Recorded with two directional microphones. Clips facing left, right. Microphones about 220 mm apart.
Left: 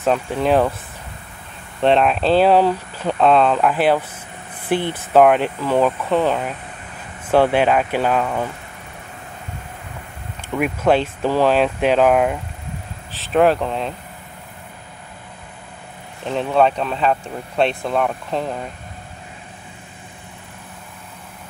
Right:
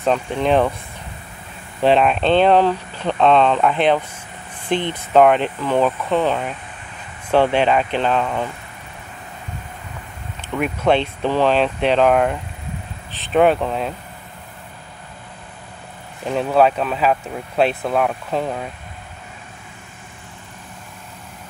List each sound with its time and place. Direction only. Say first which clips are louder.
0.0 s speech: even; 5° left (ahead or behind)
1.8 s speech: even; centre (ahead or behind)
10.5 s speech: left 1 dB; 5° left (ahead or behind)
16.3 s speech: right 1 dB; 5° right (ahead or behind)